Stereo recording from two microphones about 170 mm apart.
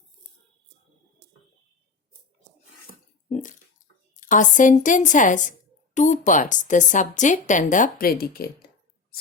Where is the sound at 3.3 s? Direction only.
45° left (ahead or behind).